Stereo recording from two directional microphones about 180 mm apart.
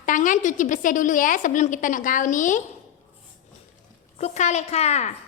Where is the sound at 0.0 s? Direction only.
45° left (ahead or behind).